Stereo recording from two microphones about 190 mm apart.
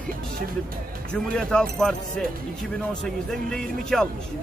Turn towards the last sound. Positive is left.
turn(degrees=0)  # may be behind; listen again after turning